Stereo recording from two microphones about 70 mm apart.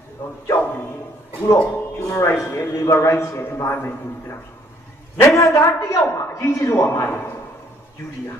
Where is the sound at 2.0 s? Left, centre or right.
Left.